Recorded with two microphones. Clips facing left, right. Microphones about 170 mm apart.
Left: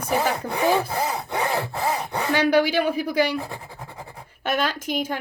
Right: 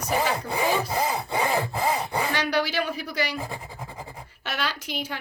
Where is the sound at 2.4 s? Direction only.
50° left (ahead or behind).